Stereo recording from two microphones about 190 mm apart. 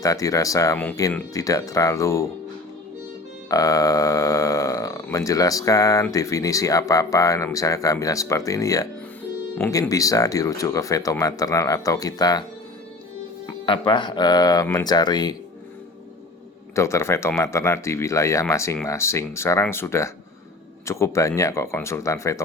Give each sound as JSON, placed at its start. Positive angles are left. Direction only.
{"t": 0.0, "sound": "speech", "side_deg": 20}
{"t": 3.5, "sound": "speech", "side_deg": 20}
{"t": 13.5, "sound": "speech", "side_deg": 25}
{"t": 16.7, "sound": "speech", "side_deg": 15}